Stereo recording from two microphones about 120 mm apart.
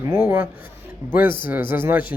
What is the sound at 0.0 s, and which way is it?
Speech, 20° right (ahead or behind).